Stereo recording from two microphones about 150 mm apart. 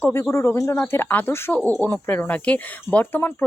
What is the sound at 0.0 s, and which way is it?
Speech, 15° left (ahead or behind).